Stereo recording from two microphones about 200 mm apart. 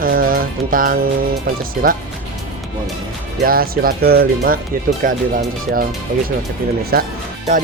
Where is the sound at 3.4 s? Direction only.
45° right (ahead or behind).